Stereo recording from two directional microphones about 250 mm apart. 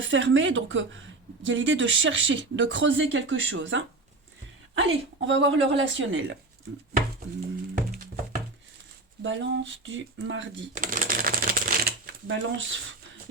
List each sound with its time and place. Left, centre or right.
0.0 s speech: right
9.2 s speech: right
10.8 s shuffling cards: right